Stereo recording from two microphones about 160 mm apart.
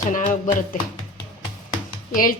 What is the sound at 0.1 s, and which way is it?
Speech, 55° left (ahead or behind).